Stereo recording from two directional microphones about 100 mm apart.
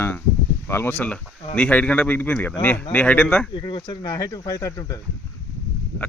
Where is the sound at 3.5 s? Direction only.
55° left (ahead or behind).